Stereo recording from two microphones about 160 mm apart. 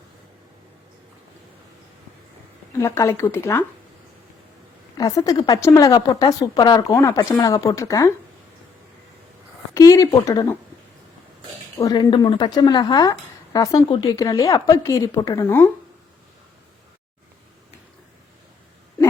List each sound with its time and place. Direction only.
2.7 s speech: 20° left (ahead or behind)
4.9 s a woman's voice: 20° left (ahead or behind)
9.7 s a woman's voice: 20° left (ahead or behind)
11.8 s a woman's voice: 20° left (ahead or behind)